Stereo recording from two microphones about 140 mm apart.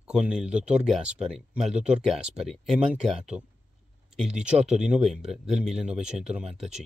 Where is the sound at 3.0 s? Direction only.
50° right (ahead or behind).